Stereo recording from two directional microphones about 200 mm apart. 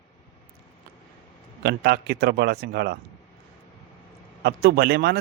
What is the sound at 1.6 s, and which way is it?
Speech, 55° right (ahead or behind).